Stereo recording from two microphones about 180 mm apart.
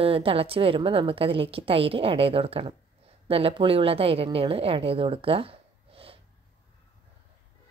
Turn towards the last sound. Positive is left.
turn(degrees=-30)  # may be behind; listen again after turning